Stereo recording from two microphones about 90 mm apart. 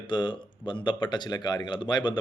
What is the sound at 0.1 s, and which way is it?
A man's voice, 65° left (ahead or behind).